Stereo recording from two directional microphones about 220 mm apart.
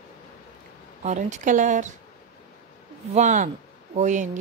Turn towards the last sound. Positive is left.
turn(degrees=-35)  # may be behind; listen again after turning